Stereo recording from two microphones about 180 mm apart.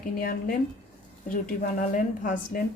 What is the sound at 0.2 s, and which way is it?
Speech, 55° left (ahead or behind).